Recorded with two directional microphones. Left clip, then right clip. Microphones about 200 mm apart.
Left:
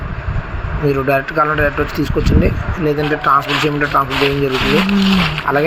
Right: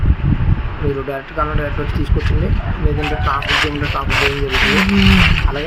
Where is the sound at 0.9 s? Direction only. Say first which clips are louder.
Left 9 dB; 15° left (ahead or behind).